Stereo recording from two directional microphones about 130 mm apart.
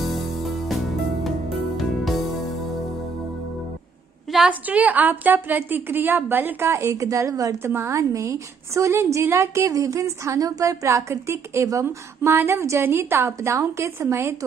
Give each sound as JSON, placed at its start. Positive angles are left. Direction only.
{"t": 0.0, "sound": "music", "side_deg": 0}
{"t": 4.3, "sound": "a woman's voice", "side_deg": -10}